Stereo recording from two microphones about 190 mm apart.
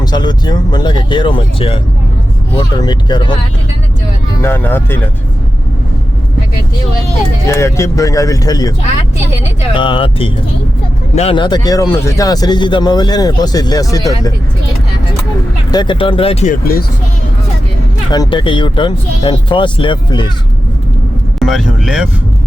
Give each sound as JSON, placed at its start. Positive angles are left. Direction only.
{"t": 0.0, "sound": "a man's voice", "side_deg": 20}
{"t": 4.4, "sound": "speech", "side_deg": 10}
{"t": 7.4, "sound": "speech", "side_deg": 15}
{"t": 9.7, "sound": "a man's voice", "side_deg": 25}
{"t": 15.7, "sound": "a man's voice", "side_deg": 25}
{"t": 18.1, "sound": "a man's voice", "side_deg": 25}
{"t": 21.3, "sound": "speech", "side_deg": 0}